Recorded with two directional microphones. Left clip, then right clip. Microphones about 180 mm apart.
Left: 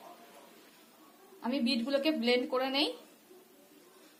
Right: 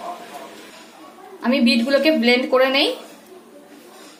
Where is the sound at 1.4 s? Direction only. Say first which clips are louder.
Right 15 dB; 40° left (ahead or behind).